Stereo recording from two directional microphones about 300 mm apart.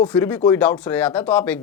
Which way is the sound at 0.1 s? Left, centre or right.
Centre.